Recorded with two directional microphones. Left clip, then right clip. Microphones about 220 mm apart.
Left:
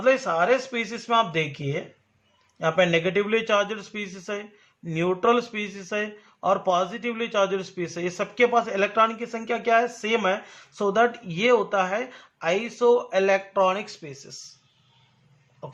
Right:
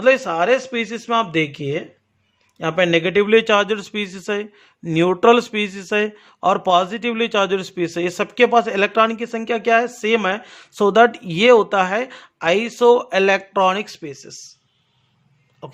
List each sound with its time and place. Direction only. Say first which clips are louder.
0.0 s a man's voice: right 5 dB; 40° right (ahead or behind)
15.6 s a man's voice: right 3 dB; 35° right (ahead or behind)